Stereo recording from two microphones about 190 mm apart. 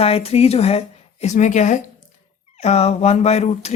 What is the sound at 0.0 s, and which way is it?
Speech, 30° left (ahead or behind).